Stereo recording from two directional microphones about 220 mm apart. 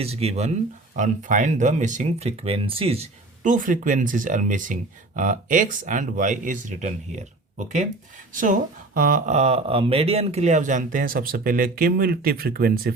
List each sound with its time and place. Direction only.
0.0 s speech: 30° right (ahead or behind)
8.3 s speech: 35° right (ahead or behind)